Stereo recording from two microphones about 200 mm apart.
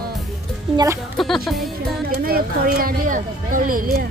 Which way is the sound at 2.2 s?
45° right (ahead or behind).